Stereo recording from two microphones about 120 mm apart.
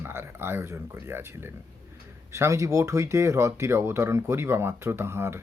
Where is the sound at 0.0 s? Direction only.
20° right (ahead or behind).